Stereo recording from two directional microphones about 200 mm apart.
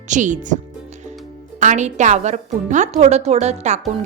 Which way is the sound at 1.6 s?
35° right (ahead or behind).